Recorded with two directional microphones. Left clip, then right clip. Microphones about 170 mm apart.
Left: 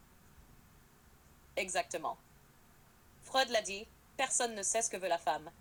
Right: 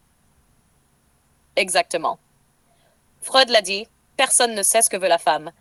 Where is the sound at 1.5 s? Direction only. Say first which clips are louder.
Right 16 dB; 50° right (ahead or behind).